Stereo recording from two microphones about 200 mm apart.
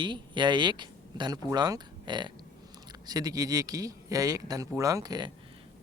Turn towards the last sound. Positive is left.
turn(degrees=-20)  # may be behind; listen again after turning